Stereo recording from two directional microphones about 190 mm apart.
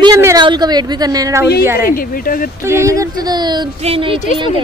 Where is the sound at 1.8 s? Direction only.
50° left (ahead or behind).